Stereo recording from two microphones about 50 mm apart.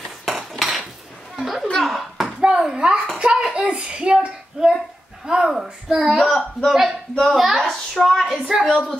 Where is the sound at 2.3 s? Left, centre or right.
Centre.